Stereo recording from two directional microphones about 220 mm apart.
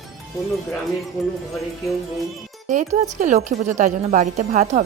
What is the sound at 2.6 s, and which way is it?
A woman's voice, 35° right (ahead or behind).